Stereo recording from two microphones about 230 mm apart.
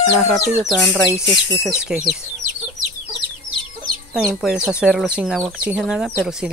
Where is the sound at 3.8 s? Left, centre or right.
Centre.